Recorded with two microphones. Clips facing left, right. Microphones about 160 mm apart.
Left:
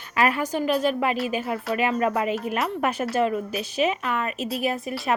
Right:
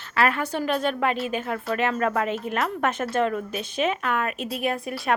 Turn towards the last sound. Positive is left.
turn(degrees=0)  # may be behind; listen again after turning